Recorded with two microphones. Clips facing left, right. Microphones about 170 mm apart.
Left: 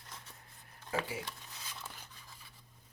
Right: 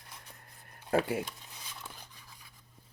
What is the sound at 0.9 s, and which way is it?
Speech, 60° right (ahead or behind).